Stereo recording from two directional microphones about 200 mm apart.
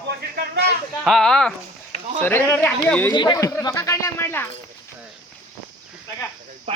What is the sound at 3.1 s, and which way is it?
Speech, 20° left (ahead or behind).